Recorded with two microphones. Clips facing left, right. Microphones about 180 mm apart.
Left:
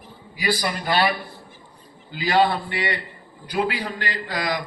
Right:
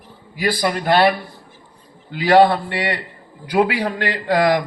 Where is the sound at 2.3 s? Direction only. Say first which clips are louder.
Right 7 dB; 55° right (ahead or behind).